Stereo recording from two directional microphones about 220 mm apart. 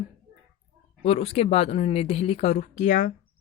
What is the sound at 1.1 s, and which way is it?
Speech, 30° left (ahead or behind).